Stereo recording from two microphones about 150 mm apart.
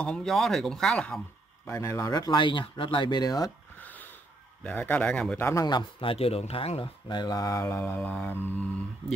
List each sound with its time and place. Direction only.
0.0 s speech: 5° left (ahead or behind)
1.7 s a man's voice: 20° left (ahead or behind)
4.6 s speech: 10° left (ahead or behind)
5.5 s a man's voice: 25° left (ahead or behind)